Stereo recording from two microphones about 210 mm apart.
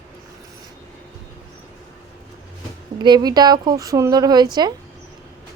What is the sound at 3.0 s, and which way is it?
Speech, 20° right (ahead or behind).